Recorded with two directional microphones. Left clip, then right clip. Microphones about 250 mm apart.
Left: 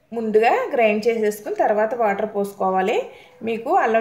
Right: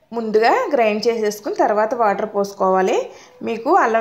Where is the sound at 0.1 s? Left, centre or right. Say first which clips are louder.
Right 2 dB; right.